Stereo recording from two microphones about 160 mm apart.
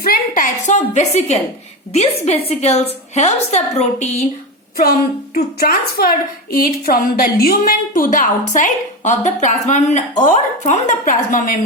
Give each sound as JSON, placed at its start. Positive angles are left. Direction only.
{"t": 0.0, "sound": "a woman's voice", "side_deg": 60}
{"t": 4.8, "sound": "a woman's voice", "side_deg": 65}